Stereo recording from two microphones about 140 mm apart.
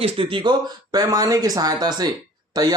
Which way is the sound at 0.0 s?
40° right (ahead or behind).